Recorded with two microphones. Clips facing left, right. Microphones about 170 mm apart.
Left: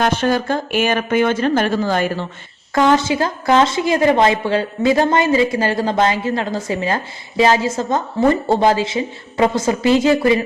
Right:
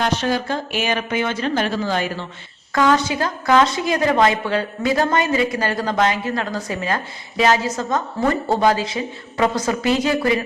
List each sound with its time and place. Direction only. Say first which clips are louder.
0.0 s speech: left 4 dB; 50° left (ahead or behind)
2.7 s a woman's voice: left 3 dB; 25° left (ahead or behind)